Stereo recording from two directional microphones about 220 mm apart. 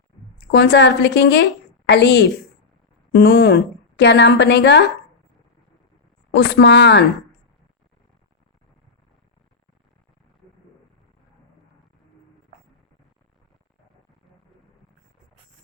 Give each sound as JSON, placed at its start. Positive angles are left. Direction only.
{"t": 0.5, "sound": "a woman's voice", "side_deg": 50}
{"t": 6.3, "sound": "a woman's voice", "side_deg": 50}